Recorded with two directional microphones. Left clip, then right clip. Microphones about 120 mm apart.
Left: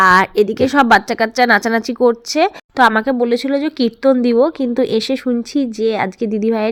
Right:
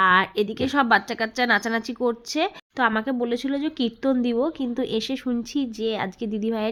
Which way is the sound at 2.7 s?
50° left (ahead or behind).